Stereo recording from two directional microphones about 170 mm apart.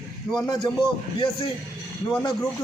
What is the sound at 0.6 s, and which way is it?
Speech, 25° left (ahead or behind).